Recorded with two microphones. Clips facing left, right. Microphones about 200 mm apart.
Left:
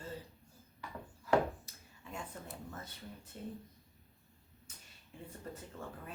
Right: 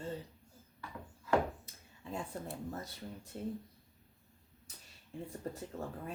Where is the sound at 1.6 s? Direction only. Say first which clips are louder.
Right 5 dB; 35° right (ahead or behind).